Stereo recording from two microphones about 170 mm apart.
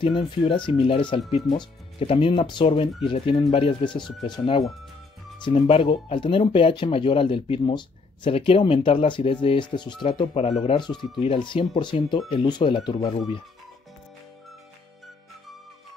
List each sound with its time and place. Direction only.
0.0 s speech: 30° left (ahead or behind)